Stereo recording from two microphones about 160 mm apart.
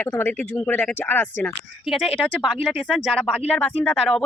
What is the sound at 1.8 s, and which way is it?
A woman's voice, centre (ahead or behind).